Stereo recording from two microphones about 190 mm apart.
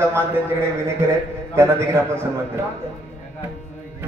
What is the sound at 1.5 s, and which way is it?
Speech, 15° right (ahead or behind).